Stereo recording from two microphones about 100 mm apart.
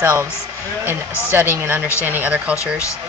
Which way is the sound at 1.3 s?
25° right (ahead or behind).